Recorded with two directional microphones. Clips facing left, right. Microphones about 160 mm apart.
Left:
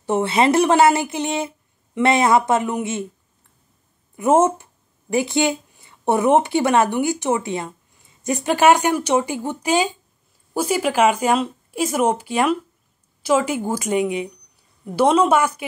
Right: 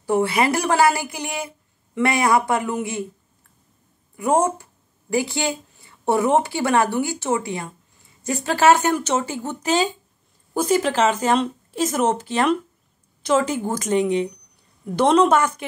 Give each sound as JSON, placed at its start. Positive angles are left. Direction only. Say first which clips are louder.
{"t": 0.0, "sound": "speech", "louder": "left 1 dB", "side_deg": 20}
{"t": 4.2, "sound": "speech", "louder": "left 3 dB", "side_deg": 20}